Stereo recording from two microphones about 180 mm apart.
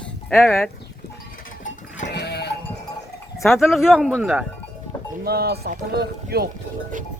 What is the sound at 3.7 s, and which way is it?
Speech, 5° right (ahead or behind).